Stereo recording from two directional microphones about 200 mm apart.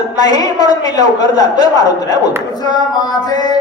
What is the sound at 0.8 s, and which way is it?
A man's voice, 20° left (ahead or behind).